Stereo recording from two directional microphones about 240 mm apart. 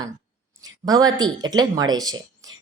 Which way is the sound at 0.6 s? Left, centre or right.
Centre.